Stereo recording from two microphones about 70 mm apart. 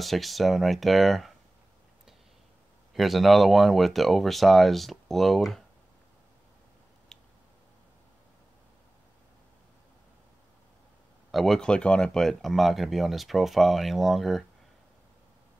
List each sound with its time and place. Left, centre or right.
0.0 s speech: centre
2.9 s speech: centre
7.1 s a sound: centre
11.3 s speech: centre
11.6 s speech: centre